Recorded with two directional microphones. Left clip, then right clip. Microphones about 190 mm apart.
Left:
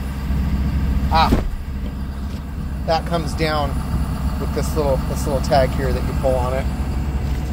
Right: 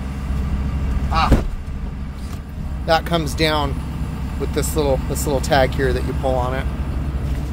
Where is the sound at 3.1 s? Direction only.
45° right (ahead or behind).